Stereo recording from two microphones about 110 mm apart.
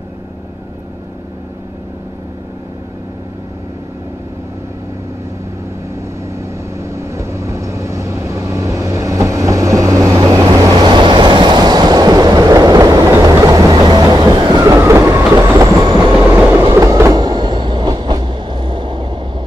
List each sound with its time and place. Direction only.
6.8 s vehicle: 25° right (ahead or behind)
16.2 s train: 10° right (ahead or behind)
16.7 s train: 25° right (ahead or behind); by 19.1 s 45° right (ahead or behind)